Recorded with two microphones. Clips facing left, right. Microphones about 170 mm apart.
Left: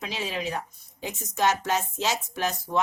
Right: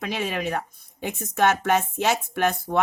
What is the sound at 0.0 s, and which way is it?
Speech, 60° right (ahead or behind).